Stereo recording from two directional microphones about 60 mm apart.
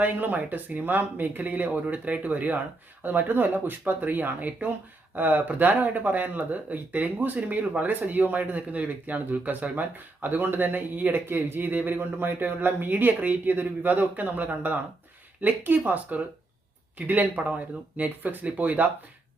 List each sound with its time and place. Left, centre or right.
0.0 s speech: right